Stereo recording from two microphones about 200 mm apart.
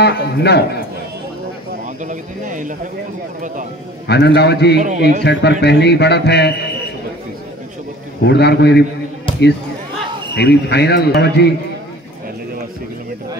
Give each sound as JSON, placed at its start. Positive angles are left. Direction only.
{"t": 0.0, "sound": "speech", "side_deg": 55}
{"t": 2.0, "sound": "speech", "side_deg": -40}
{"t": 4.1, "sound": "speech", "side_deg": 55}
{"t": 4.7, "sound": "speech", "side_deg": -40}
{"t": 5.2, "sound": "speech", "side_deg": 60}
{"t": 8.2, "sound": "speech", "side_deg": 55}
{"t": 10.3, "sound": "speech", "side_deg": 55}